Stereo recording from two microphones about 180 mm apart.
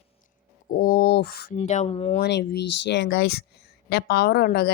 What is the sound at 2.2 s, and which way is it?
A woman's voice, 65° left (ahead or behind).